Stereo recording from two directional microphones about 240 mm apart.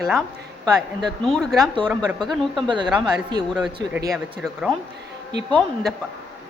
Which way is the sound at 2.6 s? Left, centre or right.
Centre.